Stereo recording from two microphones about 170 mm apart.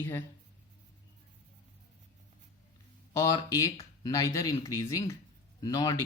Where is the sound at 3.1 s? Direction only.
20° left (ahead or behind).